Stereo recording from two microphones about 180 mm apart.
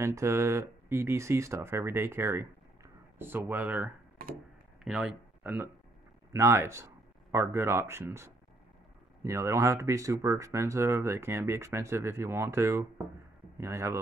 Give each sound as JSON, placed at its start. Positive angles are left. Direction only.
{"t": 0.0, "sound": "speech", "side_deg": -15}